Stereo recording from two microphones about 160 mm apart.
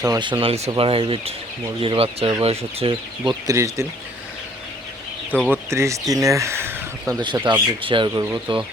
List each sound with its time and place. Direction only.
0.0 s speech: 25° right (ahead or behind)
3.4 s speech: 20° right (ahead or behind)
5.5 s speech: 15° right (ahead or behind)
7.2 s speech: 30° right (ahead or behind)